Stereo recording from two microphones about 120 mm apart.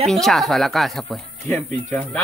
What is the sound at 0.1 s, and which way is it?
Speech, centre (ahead or behind).